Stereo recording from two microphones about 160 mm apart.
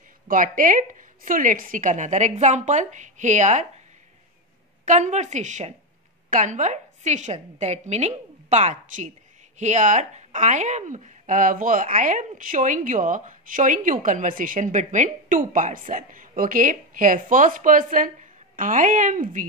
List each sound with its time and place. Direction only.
0.3 s a woman's voice: 55° right (ahead or behind)
4.8 s a woman's voice: 50° right (ahead or behind)